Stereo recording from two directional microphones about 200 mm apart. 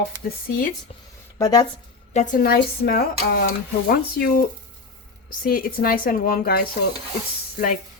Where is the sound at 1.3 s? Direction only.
15° left (ahead or behind).